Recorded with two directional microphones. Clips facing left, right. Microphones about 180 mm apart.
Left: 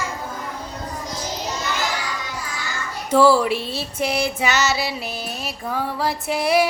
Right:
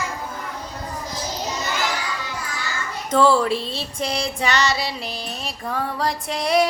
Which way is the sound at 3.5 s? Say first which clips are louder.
Even; 25° right (ahead or behind).